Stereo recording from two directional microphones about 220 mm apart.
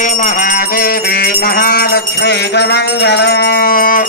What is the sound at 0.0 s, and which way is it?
Music, 35° left (ahead or behind).